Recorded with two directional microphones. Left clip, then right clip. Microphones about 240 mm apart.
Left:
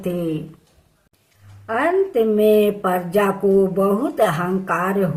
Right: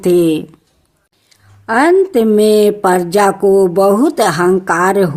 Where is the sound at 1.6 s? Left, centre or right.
Right.